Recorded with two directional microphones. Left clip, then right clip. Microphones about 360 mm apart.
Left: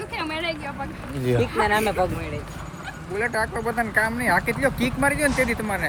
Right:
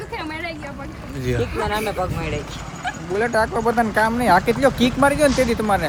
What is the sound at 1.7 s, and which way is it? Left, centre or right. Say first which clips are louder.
Speech: left 1 dB; left.